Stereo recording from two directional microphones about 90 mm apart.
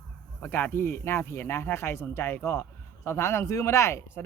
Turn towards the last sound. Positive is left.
turn(degrees=30)  # may be behind; listen again after turning